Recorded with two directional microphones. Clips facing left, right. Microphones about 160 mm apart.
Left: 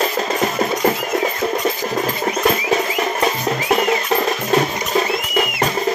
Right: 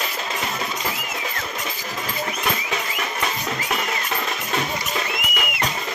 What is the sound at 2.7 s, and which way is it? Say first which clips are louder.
Music: left 9 dB; 40° left (ahead or behind).